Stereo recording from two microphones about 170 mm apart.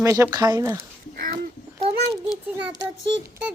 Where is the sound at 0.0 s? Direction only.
20° right (ahead or behind).